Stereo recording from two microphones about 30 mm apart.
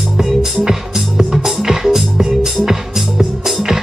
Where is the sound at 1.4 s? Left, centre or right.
Centre.